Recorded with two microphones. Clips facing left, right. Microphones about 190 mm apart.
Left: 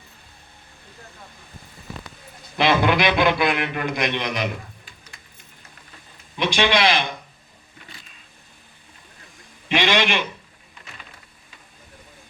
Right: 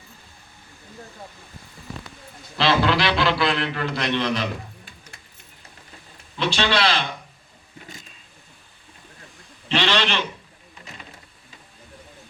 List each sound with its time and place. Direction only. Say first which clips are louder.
2.6 s a man's voice: left 1 dB; 20° left (ahead or behind)
6.3 s a man's voice: left 2 dB; 15° left (ahead or behind)
9.6 s a man's voice: left 2 dB; 15° left (ahead or behind)